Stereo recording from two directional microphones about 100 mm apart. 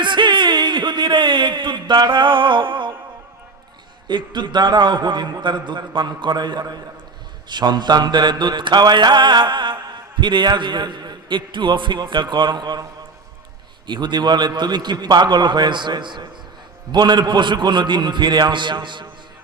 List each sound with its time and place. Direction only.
0.0 s a sound: 50° right (ahead or behind)
4.1 s a man's voice: 45° right (ahead or behind)
13.8 s a man's voice: 50° right (ahead or behind)